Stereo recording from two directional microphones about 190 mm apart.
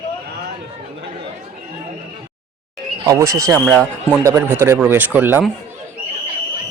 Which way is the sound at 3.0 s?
20° right (ahead or behind).